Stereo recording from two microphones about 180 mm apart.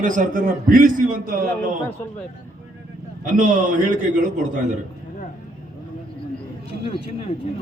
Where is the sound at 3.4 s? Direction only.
45° right (ahead or behind).